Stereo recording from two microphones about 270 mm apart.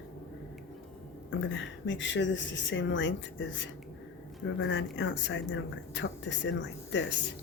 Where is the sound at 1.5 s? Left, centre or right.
Left.